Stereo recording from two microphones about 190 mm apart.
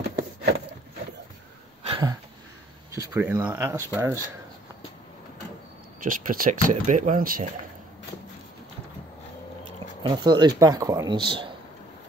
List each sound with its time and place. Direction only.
1.9 s a sound: 25° right (ahead or behind)
2.9 s speech: 15° right (ahead or behind)
6.0 s speech: 45° right (ahead or behind)
10.0 s speech: 25° right (ahead or behind)